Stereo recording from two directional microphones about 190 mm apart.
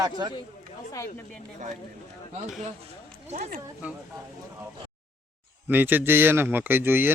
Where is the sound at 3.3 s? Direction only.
45° right (ahead or behind).